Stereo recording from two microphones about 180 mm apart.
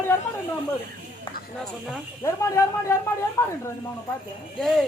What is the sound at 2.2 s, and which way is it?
Speech, 15° left (ahead or behind).